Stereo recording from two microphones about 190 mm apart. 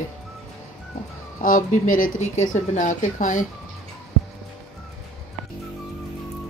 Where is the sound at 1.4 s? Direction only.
45° left (ahead or behind).